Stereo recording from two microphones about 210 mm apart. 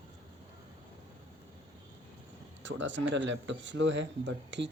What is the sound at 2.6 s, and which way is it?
Speech, 60° right (ahead or behind).